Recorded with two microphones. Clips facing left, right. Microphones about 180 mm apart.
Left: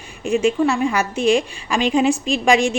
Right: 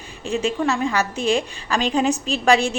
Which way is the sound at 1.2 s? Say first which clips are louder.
Left 4 dB; 35° right (ahead or behind).